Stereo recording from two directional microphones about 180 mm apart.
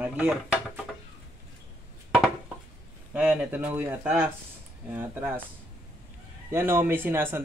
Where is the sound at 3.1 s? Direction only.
5° right (ahead or behind).